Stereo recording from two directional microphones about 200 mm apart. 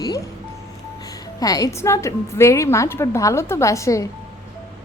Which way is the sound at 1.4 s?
15° left (ahead or behind).